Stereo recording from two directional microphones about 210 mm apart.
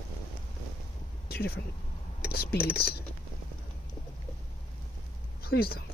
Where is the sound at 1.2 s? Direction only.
45° left (ahead or behind).